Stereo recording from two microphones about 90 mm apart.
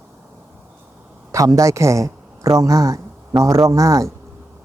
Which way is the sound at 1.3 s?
40° right (ahead or behind).